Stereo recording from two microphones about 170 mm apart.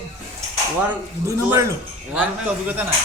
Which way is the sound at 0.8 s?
15° right (ahead or behind).